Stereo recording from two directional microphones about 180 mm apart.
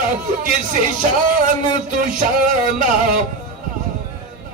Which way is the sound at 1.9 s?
50° right (ahead or behind).